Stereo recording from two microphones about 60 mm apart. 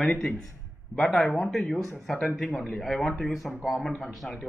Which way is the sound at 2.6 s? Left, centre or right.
Centre.